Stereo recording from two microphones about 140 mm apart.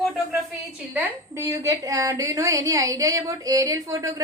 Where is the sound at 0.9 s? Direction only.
15° right (ahead or behind).